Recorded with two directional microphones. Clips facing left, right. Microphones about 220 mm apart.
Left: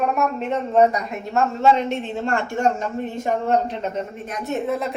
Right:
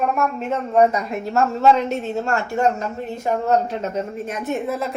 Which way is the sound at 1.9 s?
40° right (ahead or behind).